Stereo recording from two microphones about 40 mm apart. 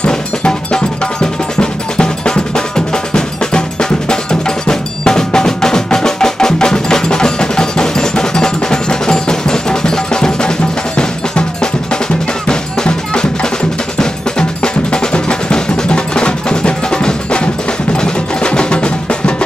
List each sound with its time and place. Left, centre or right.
0.0 s music: left
4.1 s percussion: centre
8.5 s music: centre
11.0 s cowbell: left
14.6 s music: left